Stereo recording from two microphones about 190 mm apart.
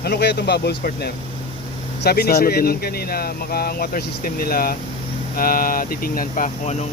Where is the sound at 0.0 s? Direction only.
60° left (ahead or behind).